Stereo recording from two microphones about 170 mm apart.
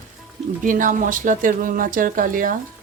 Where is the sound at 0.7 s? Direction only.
50° right (ahead or behind).